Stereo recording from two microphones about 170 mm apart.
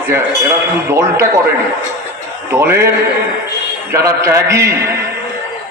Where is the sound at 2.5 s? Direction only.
15° right (ahead or behind).